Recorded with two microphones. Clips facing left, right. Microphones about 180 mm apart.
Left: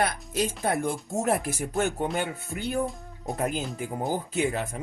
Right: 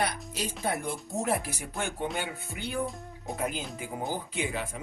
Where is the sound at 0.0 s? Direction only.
50° left (ahead or behind).